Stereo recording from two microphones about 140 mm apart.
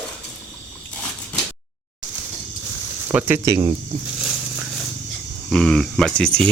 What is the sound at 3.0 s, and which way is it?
Speech, 15° right (ahead or behind).